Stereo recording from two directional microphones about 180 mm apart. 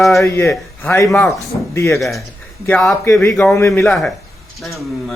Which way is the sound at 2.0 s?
Centre (ahead or behind).